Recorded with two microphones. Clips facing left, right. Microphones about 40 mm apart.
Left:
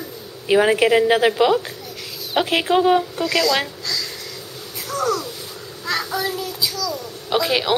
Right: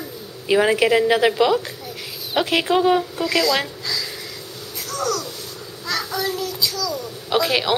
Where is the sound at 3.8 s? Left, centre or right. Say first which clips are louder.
Even; centre.